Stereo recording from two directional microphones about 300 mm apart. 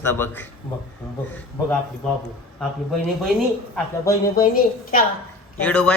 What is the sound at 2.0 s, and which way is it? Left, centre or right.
Speech, centre.